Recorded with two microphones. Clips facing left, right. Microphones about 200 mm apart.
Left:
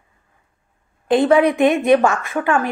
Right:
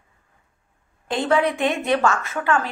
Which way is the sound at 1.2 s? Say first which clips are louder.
Left 5 dB; 15° left (ahead or behind).